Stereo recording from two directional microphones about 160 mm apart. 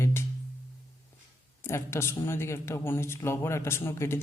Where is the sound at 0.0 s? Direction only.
15° left (ahead or behind).